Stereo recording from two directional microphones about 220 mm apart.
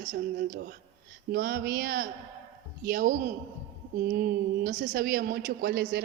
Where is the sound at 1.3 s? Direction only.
40° right (ahead or behind).